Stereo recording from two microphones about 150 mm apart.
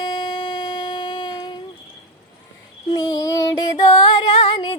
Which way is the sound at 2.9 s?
25° left (ahead or behind).